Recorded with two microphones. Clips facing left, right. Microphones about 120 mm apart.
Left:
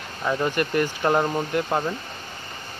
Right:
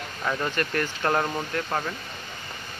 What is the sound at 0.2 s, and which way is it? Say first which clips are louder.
Speech: left 4 dB; 15° left (ahead or behind).